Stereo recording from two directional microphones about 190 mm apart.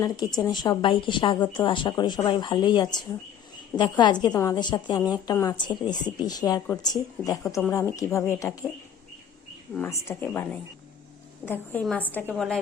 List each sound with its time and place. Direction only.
0.3 s a woman's voice: 20° left (ahead or behind)
9.7 s a woman's voice: 15° left (ahead or behind)